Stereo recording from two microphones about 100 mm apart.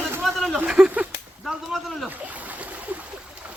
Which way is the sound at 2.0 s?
15° right (ahead or behind).